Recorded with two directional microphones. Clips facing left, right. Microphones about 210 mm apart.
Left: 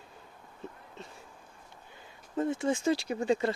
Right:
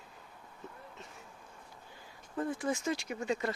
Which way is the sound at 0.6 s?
30° left (ahead or behind).